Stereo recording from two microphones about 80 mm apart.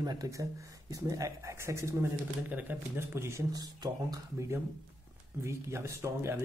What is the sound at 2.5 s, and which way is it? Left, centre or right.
Speech, right.